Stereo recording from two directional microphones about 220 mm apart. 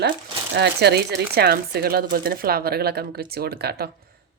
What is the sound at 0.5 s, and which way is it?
Speech, 50° right (ahead or behind).